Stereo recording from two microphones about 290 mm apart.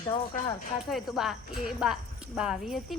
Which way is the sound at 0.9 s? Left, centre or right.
Centre.